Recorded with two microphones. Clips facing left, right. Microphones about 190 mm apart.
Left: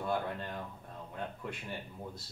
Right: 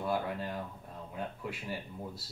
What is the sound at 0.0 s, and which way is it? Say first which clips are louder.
Speech: right 1 dB; 5° right (ahead or behind).